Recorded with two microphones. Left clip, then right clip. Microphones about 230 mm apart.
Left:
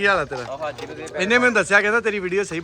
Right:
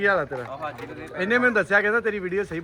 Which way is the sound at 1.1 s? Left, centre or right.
Centre.